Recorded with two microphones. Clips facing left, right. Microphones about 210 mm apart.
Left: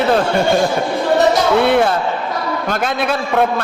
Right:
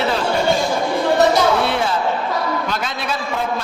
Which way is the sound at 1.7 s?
55° left (ahead or behind).